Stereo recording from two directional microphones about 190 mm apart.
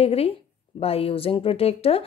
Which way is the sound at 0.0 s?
30° left (ahead or behind).